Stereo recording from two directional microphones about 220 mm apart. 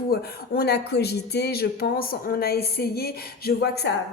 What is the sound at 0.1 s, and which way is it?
A woman's voice, 45° left (ahead or behind).